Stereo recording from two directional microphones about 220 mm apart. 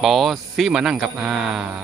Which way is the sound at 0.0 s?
Centre (ahead or behind).